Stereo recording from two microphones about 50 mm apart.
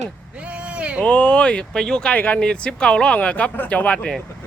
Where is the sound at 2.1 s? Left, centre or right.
Left.